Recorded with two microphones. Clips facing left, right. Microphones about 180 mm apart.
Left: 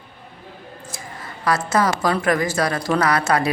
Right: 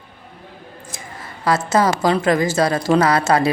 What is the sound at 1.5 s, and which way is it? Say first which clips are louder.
A woman's voice: right 3 dB; 25° right (ahead or behind).